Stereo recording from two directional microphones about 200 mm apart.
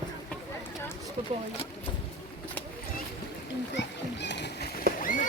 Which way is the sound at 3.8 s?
60° left (ahead or behind).